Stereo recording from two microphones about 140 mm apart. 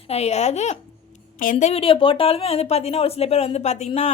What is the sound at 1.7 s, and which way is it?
Speech, 40° left (ahead or behind).